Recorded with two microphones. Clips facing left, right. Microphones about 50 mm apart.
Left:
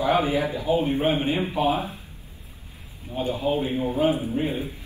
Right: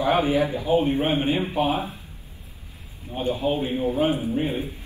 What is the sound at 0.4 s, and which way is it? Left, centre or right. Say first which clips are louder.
A man's voice: right 2 dB; right.